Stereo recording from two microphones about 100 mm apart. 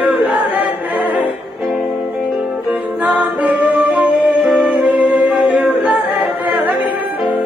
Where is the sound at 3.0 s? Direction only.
15° right (ahead or behind).